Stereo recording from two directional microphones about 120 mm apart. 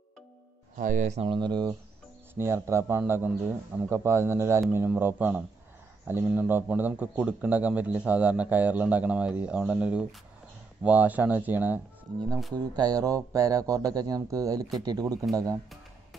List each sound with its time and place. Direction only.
0.7 s speech: 90° right
1.2 s speech: 40° right (ahead or behind)
2.3 s a man's voice: 20° right (ahead or behind)
12.5 s speech: 35° right (ahead or behind)